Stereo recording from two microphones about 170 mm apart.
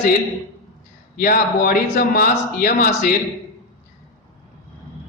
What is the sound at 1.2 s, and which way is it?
A man's voice, 55° left (ahead or behind).